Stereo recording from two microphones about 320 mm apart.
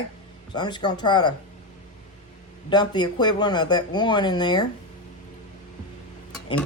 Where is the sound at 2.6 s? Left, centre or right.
Centre.